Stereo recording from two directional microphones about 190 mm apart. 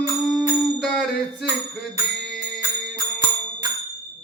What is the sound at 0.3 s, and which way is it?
Music, centre (ahead or behind).